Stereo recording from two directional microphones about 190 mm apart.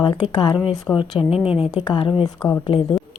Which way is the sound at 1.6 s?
30° left (ahead or behind).